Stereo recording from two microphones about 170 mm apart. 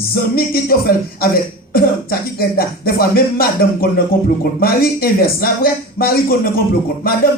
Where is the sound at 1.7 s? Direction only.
60° left (ahead or behind).